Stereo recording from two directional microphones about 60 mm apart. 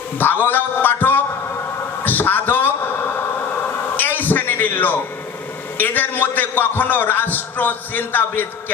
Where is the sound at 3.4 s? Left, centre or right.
Left.